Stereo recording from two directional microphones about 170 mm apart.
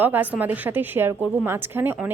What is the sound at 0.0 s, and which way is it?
A woman's voice, 10° right (ahead or behind).